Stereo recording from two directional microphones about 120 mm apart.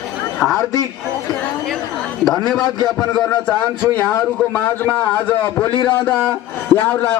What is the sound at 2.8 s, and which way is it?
Speech, 35° left (ahead or behind).